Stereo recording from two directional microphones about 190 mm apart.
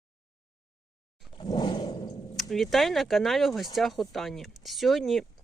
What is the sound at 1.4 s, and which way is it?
Roar, 25° left (ahead or behind).